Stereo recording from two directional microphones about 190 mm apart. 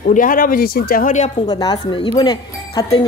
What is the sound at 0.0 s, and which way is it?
Speech, 45° left (ahead or behind).